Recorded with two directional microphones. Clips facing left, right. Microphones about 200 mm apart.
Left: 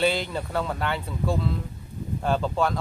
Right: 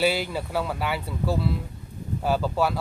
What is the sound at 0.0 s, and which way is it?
Speech, 5° right (ahead or behind).